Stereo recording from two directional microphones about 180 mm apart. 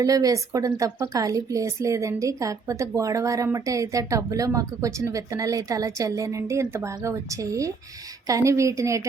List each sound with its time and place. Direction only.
0.0 s a woman's voice: 20° right (ahead or behind)